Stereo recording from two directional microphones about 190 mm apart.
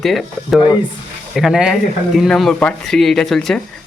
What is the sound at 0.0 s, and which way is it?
Speech, centre (ahead or behind).